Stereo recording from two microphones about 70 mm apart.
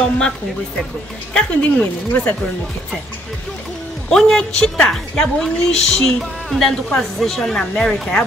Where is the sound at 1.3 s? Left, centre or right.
Centre.